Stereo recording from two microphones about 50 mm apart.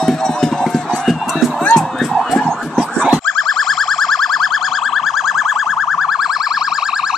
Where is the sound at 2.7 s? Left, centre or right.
Centre.